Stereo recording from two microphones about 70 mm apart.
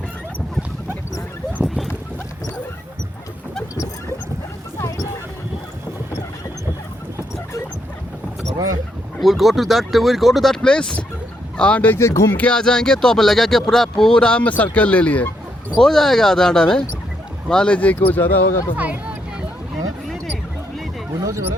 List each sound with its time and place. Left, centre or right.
4.8 s music: left
8.5 s boat: right
9.2 s speech: centre; by 11.9 s left
11.9 s speech: left
12.3 s speech: left
12.5 s speech: centre
15.8 s speech: centre
17.7 s speech: left
18.8 s speech: centre
21.2 s a sound: right